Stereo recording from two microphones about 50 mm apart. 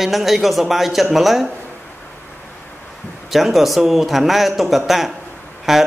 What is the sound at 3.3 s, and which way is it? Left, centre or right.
A man's voice, centre.